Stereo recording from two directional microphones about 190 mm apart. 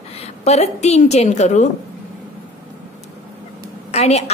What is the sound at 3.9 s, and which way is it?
Speech, 35° left (ahead or behind).